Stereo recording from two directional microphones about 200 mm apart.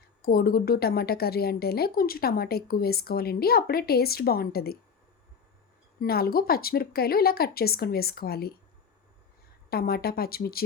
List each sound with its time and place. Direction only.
0.2 s a woman's voice: 50° left (ahead or behind)
6.0 s a woman's voice: 50° left (ahead or behind)
9.6 s a woman's voice: 50° left (ahead or behind)